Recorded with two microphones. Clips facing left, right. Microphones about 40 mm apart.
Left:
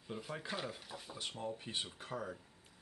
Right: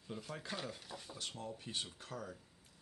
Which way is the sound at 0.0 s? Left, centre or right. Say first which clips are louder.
Left 2 dB; centre.